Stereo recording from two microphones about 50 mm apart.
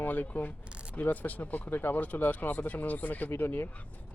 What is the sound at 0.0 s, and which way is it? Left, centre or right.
Speech, left.